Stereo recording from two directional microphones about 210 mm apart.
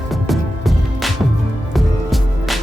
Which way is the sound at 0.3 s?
Centre (ahead or behind).